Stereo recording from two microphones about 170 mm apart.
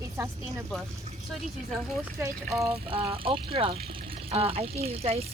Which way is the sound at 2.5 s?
Centre (ahead or behind).